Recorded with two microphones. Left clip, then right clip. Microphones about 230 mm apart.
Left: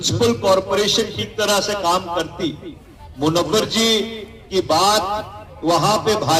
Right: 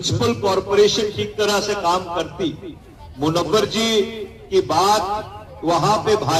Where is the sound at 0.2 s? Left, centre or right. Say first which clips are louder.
Left 4 dB; left.